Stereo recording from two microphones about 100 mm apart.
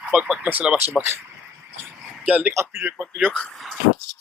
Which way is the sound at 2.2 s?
15° right (ahead or behind).